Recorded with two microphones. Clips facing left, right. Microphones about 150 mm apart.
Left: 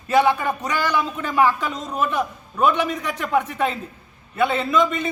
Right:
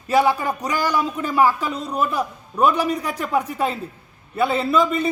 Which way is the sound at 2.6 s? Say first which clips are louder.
Right 1 dB; 35° right (ahead or behind).